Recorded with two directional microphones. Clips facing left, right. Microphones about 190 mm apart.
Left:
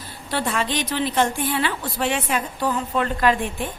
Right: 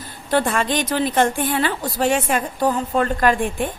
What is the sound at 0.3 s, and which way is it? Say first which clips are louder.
A woman's voice: right 5 dB; 50° right (ahead or behind).